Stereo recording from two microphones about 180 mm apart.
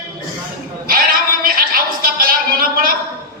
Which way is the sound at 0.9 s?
55° right (ahead or behind).